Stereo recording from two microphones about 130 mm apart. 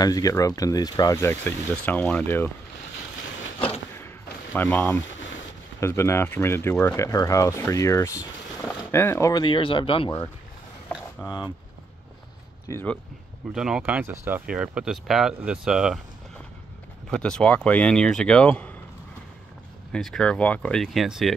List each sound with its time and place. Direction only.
0.0 s speech: 30° left (ahead or behind)
1.1 s speech: 20° left (ahead or behind)
4.6 s speech: 15° left (ahead or behind)
9.4 s speech: 40° left (ahead or behind)
11.2 s speech: 30° left (ahead or behind)
12.7 s speech: 20° left (ahead or behind)
13.6 s speech: 5° right (ahead or behind)
17.1 s speech: 5° left (ahead or behind)
19.9 s speech: 5° left (ahead or behind)